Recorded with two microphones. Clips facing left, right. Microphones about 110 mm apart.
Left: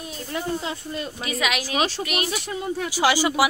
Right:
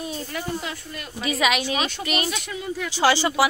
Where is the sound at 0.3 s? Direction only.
25° left (ahead or behind).